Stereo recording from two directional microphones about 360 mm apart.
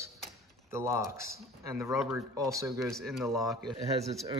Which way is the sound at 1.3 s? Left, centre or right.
Centre.